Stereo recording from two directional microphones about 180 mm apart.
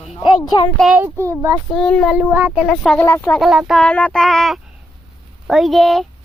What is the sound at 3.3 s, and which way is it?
A child's voice, centre (ahead or behind).